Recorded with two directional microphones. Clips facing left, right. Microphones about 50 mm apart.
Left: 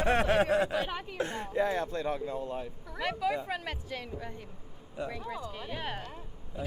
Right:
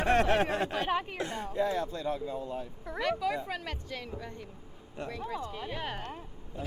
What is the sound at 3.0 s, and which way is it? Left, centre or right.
Speech, centre.